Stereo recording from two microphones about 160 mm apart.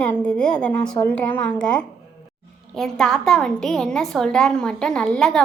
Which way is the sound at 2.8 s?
Centre (ahead or behind).